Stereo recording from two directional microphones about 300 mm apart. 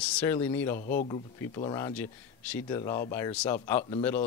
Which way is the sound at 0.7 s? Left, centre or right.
Left.